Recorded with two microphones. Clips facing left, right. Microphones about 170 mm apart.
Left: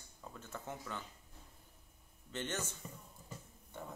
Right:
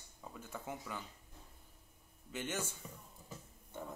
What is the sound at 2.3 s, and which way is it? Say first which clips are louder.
Speech: even; 10° right (ahead or behind).